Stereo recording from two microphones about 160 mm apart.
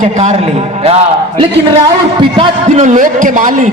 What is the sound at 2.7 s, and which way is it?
Speech, 50° right (ahead or behind).